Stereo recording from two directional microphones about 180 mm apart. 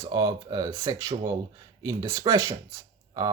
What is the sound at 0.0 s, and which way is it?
Speech, 20° right (ahead or behind).